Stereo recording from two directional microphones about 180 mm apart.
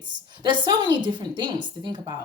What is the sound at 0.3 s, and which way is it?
A woman's voice, 25° right (ahead or behind).